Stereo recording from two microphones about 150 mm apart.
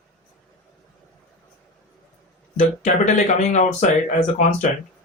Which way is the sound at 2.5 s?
55° left (ahead or behind).